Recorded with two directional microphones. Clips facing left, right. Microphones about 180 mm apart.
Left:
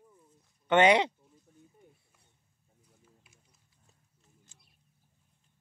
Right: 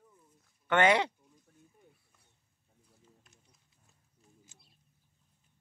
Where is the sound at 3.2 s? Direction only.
10° left (ahead or behind).